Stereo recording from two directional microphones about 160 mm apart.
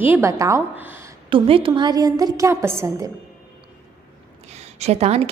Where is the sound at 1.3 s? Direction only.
35° right (ahead or behind); by 2.7 s 15° right (ahead or behind).